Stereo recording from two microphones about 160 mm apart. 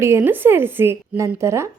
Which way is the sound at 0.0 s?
15° right (ahead or behind).